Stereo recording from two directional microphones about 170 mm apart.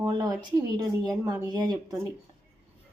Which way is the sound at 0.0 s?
20° right (ahead or behind).